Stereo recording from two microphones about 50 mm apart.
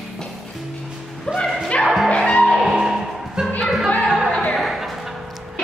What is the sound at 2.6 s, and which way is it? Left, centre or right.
Music, centre.